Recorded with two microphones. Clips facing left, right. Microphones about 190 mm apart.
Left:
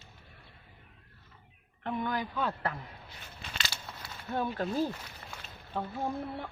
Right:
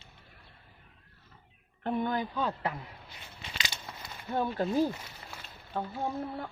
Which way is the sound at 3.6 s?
15° right (ahead or behind).